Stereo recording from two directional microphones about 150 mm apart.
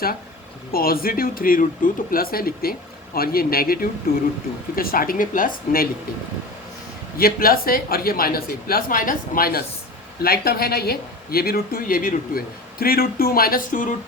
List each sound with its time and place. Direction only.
0.7 s speech: 80° left
7.2 s speech: 80° left
12.8 s speech: 85° left; by 13.9 s 70° left (ahead or behind)